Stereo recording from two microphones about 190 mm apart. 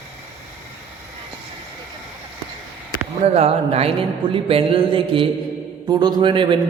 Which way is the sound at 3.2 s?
35° right (ahead or behind).